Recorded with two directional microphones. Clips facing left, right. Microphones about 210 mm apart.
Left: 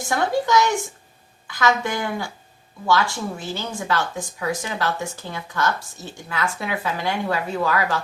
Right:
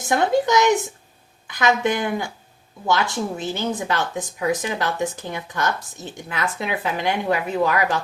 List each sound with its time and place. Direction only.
0.1 s a woman's voice: 20° right (ahead or behind)